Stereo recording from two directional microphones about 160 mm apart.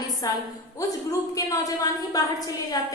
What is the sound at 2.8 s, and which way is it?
Speech, 25° left (ahead or behind).